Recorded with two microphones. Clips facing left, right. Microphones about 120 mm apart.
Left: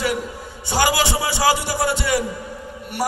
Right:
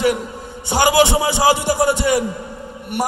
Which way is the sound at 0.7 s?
20° right (ahead or behind).